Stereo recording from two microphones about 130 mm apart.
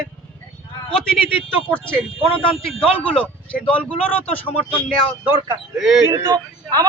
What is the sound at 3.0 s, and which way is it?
Speech, 10° left (ahead or behind).